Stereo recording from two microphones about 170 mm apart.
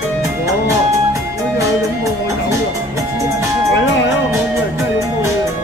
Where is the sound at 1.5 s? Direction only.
20° right (ahead or behind).